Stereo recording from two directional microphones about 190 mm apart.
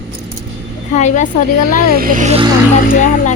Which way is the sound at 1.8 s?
50° right (ahead or behind).